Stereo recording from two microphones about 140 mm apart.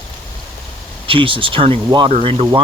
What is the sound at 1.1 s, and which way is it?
Speech, 40° right (ahead or behind).